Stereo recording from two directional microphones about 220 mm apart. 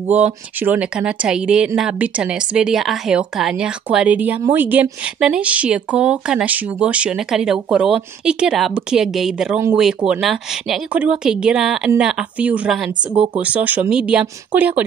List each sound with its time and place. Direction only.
0.1 s speech: 5° right (ahead or behind)
13.1 s speech: 25° right (ahead or behind)
13.4 s speech: 5° right (ahead or behind)